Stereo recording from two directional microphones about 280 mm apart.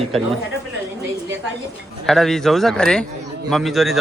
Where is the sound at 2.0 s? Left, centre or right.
Centre.